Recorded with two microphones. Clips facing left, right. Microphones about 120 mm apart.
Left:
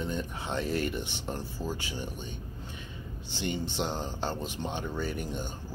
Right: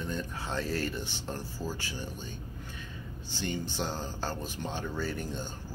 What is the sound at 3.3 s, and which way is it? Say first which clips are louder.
Speech: left 2 dB; 25° left (ahead or behind).